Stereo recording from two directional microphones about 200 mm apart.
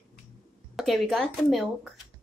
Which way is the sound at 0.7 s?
Centre (ahead or behind).